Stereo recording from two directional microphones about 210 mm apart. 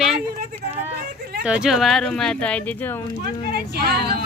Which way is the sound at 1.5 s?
5° right (ahead or behind).